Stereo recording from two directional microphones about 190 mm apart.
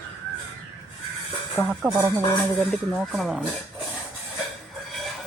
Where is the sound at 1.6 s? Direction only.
15° left (ahead or behind).